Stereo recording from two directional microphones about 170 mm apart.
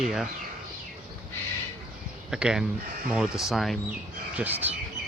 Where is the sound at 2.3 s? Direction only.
5° right (ahead or behind).